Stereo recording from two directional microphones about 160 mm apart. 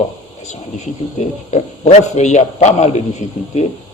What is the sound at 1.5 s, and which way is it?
A man's voice, 45° left (ahead or behind).